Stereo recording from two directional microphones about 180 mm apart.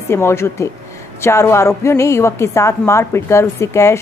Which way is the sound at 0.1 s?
15° left (ahead or behind).